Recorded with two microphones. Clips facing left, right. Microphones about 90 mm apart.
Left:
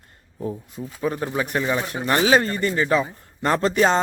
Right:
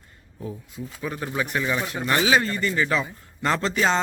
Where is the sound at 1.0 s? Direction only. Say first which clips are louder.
Left 4 dB; 30° left (ahead or behind).